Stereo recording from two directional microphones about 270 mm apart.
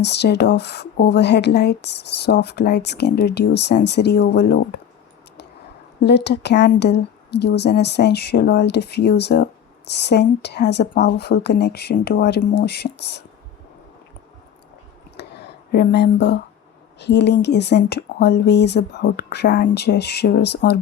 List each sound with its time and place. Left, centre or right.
0.0 s speech: left
6.0 s speech: left
15.7 s speech: left